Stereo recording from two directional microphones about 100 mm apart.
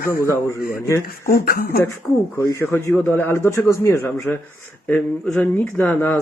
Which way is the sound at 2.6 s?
25° left (ahead or behind).